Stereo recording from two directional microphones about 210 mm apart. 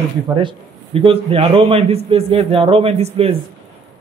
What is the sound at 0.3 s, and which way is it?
A man's voice, 25° right (ahead or behind).